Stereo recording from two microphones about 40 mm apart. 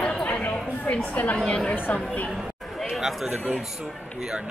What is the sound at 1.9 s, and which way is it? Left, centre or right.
Speech, left.